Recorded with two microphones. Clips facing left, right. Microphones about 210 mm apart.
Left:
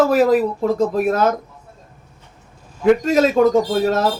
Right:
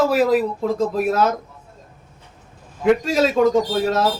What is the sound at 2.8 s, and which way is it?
Speech, centre (ahead or behind).